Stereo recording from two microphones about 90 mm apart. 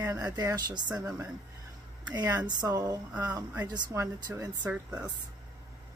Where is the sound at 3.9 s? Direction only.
30° right (ahead or behind).